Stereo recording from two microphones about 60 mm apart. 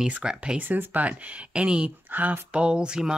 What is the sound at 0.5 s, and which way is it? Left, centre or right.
Speech, right.